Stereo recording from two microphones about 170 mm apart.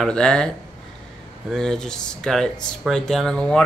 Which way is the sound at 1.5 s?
5° left (ahead or behind).